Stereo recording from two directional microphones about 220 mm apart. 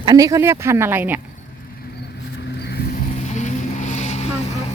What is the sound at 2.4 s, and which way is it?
Vehicle, 50° left (ahead or behind).